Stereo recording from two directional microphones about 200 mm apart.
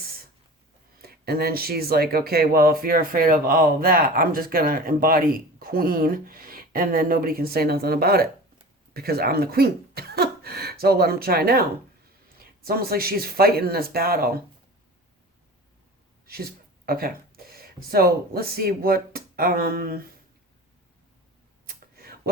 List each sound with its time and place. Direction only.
1.0 s speech: 50° right (ahead or behind)
12.6 s speech: 50° right (ahead or behind)
16.8 s speech: 50° right (ahead or behind)
21.9 s a sound: 50° right (ahead or behind)